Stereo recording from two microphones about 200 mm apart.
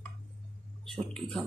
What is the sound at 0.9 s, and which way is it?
Speech, 5° left (ahead or behind).